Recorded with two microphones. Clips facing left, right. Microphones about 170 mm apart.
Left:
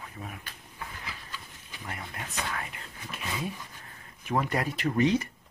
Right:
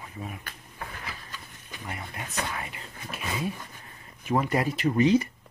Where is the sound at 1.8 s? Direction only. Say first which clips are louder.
Right 2 dB; 10° right (ahead or behind).